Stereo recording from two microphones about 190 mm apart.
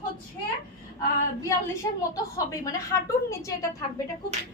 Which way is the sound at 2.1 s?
15° left (ahead or behind).